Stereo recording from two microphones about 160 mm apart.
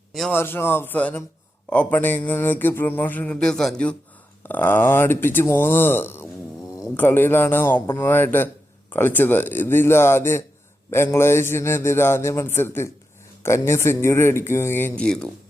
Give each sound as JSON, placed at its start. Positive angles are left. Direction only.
{"t": 0.3, "sound": "mantra", "side_deg": 15}